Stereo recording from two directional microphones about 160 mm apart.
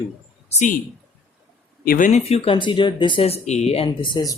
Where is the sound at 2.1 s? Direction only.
40° left (ahead or behind).